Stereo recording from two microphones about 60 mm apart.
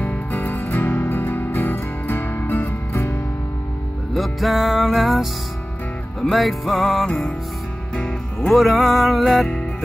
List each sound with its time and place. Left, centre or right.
0.0 s music: left
4.1 s music: centre
6.3 s music: centre
7.9 s music: centre